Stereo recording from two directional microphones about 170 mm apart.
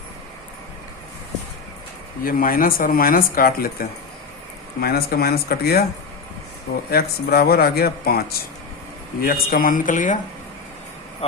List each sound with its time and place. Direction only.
2.2 s speech: 55° left (ahead or behind)
6.9 s speech: 65° left (ahead or behind)
11.2 s speech: 35° left (ahead or behind)